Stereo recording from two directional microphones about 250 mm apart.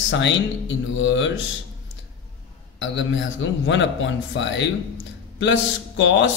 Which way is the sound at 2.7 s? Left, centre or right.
Left.